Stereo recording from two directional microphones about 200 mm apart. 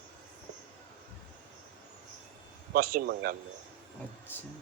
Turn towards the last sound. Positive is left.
turn(degrees=-50)  # may be behind; listen again after turning